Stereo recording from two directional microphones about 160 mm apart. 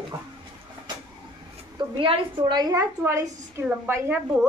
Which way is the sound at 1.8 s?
30° right (ahead or behind).